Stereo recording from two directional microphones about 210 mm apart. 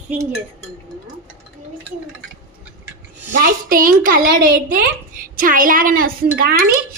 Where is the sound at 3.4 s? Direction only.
40° right (ahead or behind).